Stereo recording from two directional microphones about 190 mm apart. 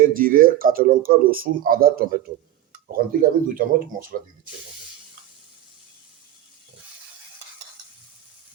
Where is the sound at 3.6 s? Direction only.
50° right (ahead or behind).